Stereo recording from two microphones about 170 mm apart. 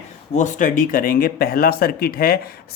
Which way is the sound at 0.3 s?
45° left (ahead or behind).